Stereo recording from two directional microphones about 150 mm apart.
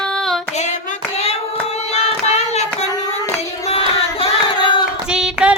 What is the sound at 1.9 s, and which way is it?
Child singing, 45° left (ahead or behind).